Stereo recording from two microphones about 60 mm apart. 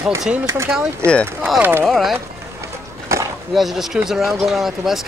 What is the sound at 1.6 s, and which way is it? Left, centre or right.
Speech, right.